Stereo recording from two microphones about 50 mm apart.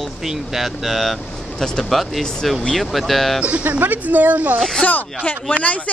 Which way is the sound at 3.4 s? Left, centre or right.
Right.